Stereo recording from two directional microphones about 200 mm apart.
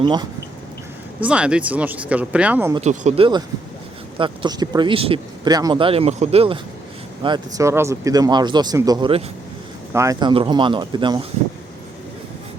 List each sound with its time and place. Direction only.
0.0 s speech: 20° right (ahead or behind)
1.2 s speech: 5° right (ahead or behind)
2.8 s speech: 35° right (ahead or behind)